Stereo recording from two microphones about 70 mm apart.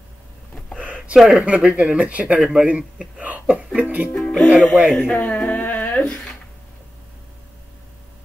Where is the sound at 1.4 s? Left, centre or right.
Centre.